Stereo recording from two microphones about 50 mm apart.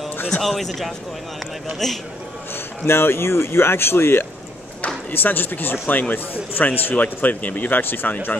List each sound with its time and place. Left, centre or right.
0.4 s a man's voice: centre
2.9 s speech: left